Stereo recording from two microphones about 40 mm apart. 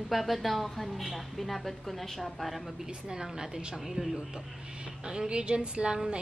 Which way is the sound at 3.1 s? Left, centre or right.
Centre.